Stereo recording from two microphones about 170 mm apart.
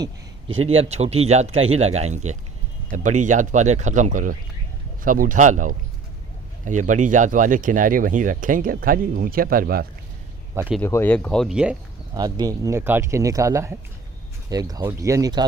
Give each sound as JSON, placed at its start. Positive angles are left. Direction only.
{"t": 0.6, "sound": "speech", "side_deg": -35}
{"t": 10.5, "sound": "speech", "side_deg": -15}
{"t": 10.8, "sound": "speech", "side_deg": 15}
{"t": 12.1, "sound": "speech", "side_deg": -25}